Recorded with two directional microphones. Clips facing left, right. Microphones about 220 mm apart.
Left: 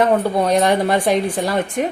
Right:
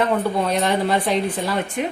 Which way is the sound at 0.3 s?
45° left (ahead or behind).